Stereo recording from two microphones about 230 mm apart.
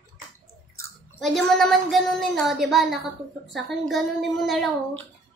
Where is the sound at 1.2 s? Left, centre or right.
Centre.